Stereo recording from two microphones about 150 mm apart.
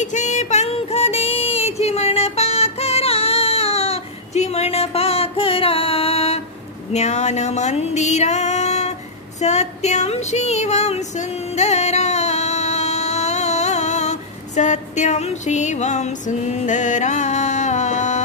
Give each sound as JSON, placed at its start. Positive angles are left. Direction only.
{"t": 0.0, "sound": "female singing", "side_deg": 55}
{"t": 6.9, "sound": "a sound", "side_deg": 50}
{"t": 9.4, "sound": "child singing", "side_deg": 50}